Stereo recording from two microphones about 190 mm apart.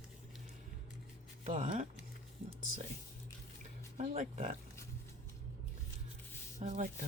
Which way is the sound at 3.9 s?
35° right (ahead or behind).